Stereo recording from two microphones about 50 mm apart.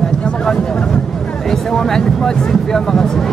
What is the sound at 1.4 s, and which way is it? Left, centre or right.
Speech, centre.